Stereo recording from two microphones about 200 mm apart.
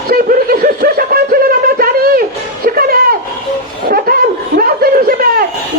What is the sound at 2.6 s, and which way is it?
Music, 50° right (ahead or behind).